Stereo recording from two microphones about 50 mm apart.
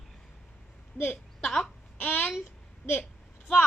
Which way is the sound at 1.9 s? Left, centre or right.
Left.